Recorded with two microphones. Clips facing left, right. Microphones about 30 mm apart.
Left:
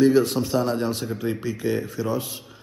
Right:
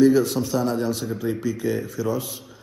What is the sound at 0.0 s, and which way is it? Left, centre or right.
A man's voice, left.